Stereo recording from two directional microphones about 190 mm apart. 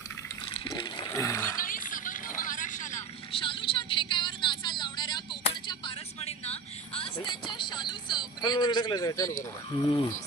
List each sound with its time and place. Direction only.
0.4 s water: 25° left (ahead or behind)
1.6 s a sound: 45° left (ahead or behind)
3.3 s vehicle: 25° left (ahead or behind)
9.7 s speech: 25° left (ahead or behind)